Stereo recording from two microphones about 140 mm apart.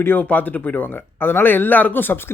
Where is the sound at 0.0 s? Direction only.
15° left (ahead or behind).